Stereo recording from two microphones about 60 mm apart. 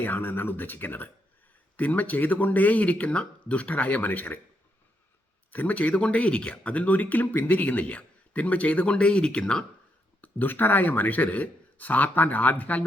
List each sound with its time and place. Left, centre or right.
0.0 s speech: left
5.5 s speech: left
10.2 s speech: left